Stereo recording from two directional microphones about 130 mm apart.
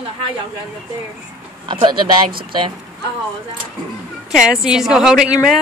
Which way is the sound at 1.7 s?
35° right (ahead or behind).